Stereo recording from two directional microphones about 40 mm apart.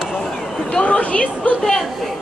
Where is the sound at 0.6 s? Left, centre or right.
Left.